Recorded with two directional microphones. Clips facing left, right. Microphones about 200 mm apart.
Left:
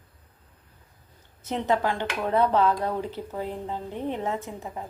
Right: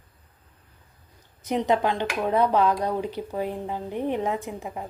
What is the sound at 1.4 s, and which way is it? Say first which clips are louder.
Speech: right 2 dB; 15° right (ahead or behind).